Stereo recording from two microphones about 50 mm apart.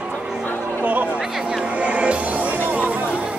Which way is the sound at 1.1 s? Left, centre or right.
Centre.